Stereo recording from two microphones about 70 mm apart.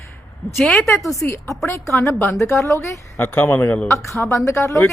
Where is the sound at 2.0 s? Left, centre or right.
Left.